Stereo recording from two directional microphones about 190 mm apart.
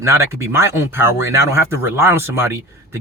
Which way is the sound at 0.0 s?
15° right (ahead or behind).